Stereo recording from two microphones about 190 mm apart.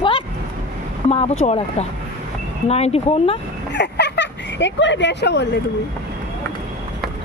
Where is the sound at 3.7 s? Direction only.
65° left (ahead or behind).